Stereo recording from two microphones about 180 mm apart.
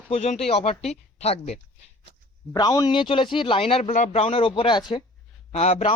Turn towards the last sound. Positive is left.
turn(degrees=35)  # may be behind; listen again after turning